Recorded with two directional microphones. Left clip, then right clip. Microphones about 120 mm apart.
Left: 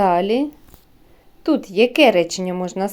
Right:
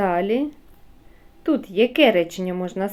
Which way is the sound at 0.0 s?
40° left (ahead or behind).